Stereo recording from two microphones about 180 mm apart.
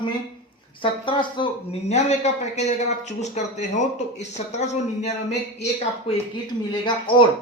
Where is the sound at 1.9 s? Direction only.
40° left (ahead or behind).